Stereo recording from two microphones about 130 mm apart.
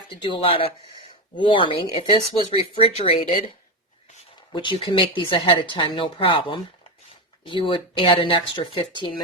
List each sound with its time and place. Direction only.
0.1 s speech: 40° left (ahead or behind)
4.5 s speech: 35° left (ahead or behind)